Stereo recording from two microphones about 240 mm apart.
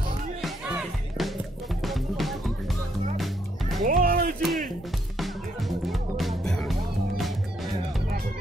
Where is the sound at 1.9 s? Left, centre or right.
Centre.